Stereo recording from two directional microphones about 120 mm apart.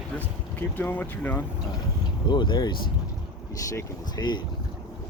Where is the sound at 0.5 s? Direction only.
15° left (ahead or behind).